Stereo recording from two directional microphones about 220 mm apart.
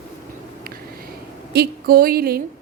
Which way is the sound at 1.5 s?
45° right (ahead or behind).